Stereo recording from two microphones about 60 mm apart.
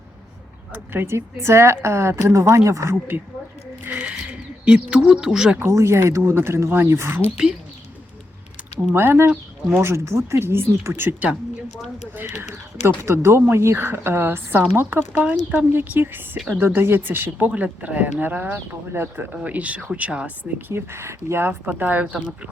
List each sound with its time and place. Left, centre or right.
0.7 s speech: right
3.8 s a sound: right
4.6 s speech: centre
5.5 s speech: right
9.0 s speech: right
9.8 s speech: right
12.1 s speech: right
17.4 s speech: right
19.4 s speech: right
20.7 s speech: right
21.6 s speech: right